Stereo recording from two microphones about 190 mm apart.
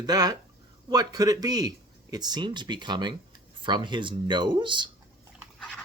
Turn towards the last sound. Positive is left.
turn(degrees=-25)  # may be behind; listen again after turning